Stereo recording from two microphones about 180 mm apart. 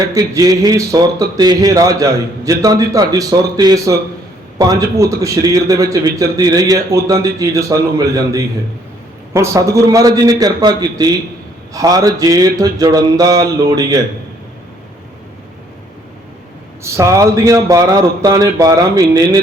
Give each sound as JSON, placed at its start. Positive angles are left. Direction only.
{"t": 0.0, "sound": "a man's voice", "side_deg": -20}
{"t": 16.8, "sound": "a man's voice", "side_deg": -15}